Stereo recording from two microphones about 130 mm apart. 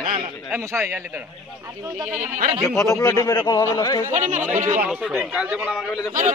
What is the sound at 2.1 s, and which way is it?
Speech, 70° right (ahead or behind).